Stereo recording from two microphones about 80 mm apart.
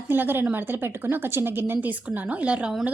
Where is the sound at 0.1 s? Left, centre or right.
Right.